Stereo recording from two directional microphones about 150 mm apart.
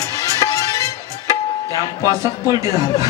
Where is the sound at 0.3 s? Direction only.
25° left (ahead or behind).